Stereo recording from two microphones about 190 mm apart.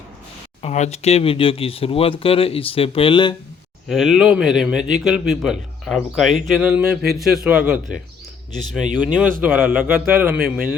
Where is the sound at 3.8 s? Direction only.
Centre (ahead or behind).